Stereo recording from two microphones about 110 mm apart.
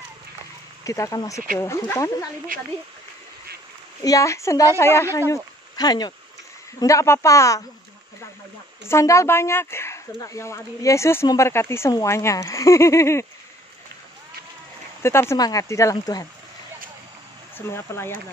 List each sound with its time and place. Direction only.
0.8 s speech: 30° left (ahead or behind)
4.0 s speech: 30° left (ahead or behind)
5.3 s speech: 35° left (ahead or behind)
8.8 s speech: 25° left (ahead or behind)
15.0 s speech: 25° left (ahead or behind)
17.6 s speech: 20° left (ahead or behind)